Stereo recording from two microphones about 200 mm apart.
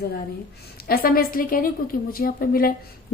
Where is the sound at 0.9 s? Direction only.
45° left (ahead or behind).